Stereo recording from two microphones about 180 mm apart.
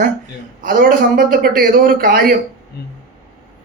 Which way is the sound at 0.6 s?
55° right (ahead or behind).